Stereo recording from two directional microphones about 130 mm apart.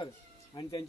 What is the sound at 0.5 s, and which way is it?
Speech, 35° left (ahead or behind).